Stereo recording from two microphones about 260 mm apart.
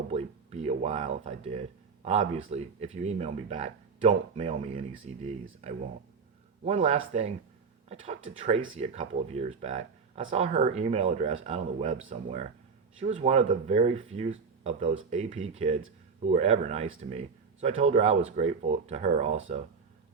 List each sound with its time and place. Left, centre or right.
0.1 s speech: right